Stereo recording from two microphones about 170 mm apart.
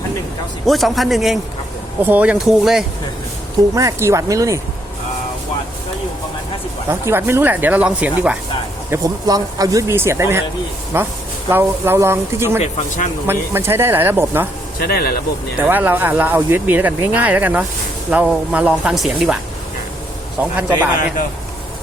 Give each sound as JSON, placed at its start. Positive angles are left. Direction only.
{"t": 0.7, "sound": "speech", "side_deg": 0}
{"t": 3.8, "sound": "speech", "side_deg": -20}
{"t": 6.8, "sound": "speech", "side_deg": -15}
{"t": 8.9, "sound": "speech", "side_deg": -20}
{"t": 14.8, "sound": "speech", "side_deg": 60}
{"t": 15.5, "sound": "speech", "side_deg": -10}
{"t": 20.4, "sound": "speech", "side_deg": -10}